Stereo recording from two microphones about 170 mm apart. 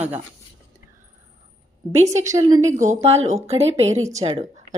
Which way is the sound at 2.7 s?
45° right (ahead or behind).